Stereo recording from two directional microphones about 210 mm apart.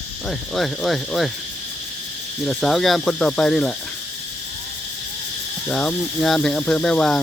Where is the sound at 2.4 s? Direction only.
Centre (ahead or behind).